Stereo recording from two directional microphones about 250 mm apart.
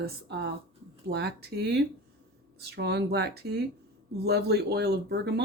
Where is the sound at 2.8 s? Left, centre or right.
Right.